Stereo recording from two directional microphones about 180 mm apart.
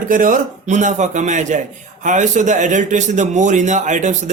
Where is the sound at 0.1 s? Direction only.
50° right (ahead or behind).